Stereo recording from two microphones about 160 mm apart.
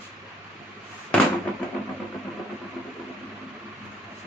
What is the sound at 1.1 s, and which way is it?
Fireworks, 5° left (ahead or behind).